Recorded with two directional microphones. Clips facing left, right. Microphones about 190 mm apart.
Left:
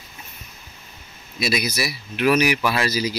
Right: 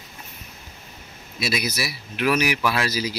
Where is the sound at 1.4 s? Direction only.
5° right (ahead or behind).